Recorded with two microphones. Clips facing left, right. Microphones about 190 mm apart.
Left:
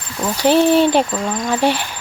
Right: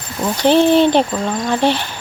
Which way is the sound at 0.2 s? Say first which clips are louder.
Right 1 dB; 5° left (ahead or behind).